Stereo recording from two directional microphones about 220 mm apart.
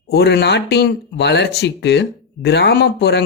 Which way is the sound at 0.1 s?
50° left (ahead or behind).